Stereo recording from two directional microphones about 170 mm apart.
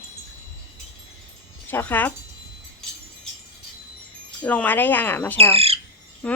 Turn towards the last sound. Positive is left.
turn(degrees=5)  # may be behind; listen again after turning